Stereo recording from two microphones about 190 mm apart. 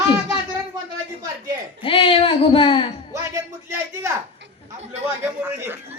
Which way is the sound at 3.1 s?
15° right (ahead or behind).